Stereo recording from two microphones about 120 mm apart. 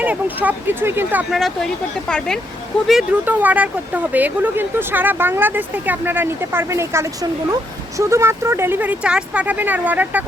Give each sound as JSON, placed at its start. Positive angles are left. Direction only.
{"t": 0.0, "sound": "speech", "side_deg": -15}
{"t": 1.3, "sound": "speech", "side_deg": 0}
{"t": 3.1, "sound": "speech", "side_deg": -15}